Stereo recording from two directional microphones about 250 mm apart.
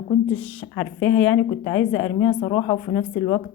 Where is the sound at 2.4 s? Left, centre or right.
Left.